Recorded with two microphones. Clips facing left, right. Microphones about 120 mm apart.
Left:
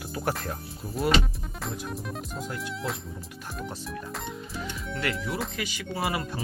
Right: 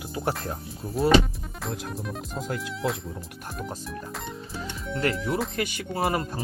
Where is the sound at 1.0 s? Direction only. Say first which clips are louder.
Right 4 dB; centre (ahead or behind).